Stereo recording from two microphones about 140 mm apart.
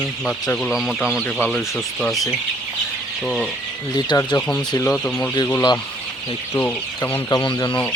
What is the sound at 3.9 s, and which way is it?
Speech, 30° left (ahead or behind).